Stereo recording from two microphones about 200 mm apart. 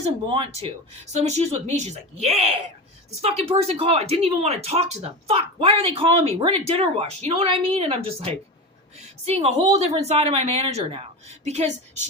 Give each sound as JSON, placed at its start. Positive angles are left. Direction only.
{"t": 0.0, "sound": "speech", "side_deg": -30}